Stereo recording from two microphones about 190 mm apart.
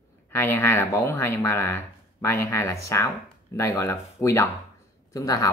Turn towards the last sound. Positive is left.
turn(degrees=20)  # may be behind; listen again after turning